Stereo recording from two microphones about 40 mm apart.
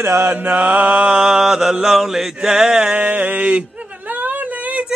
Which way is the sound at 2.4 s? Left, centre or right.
Centre.